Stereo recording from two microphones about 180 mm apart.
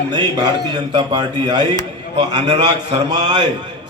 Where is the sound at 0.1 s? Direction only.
25° right (ahead or behind).